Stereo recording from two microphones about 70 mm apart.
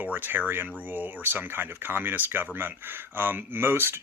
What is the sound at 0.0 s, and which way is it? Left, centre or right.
Speech, right.